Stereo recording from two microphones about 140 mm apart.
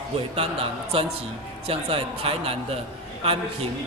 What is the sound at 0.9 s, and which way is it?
A man's voice, 40° right (ahead or behind).